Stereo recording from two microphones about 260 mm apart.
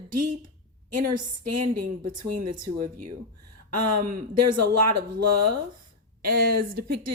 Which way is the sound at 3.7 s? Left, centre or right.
Right.